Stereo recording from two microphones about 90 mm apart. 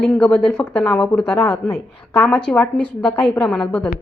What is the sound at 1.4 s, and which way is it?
Speech, 25° left (ahead or behind).